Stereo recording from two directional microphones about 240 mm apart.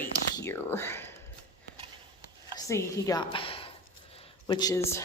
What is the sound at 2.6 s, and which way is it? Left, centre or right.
A woman's voice, centre.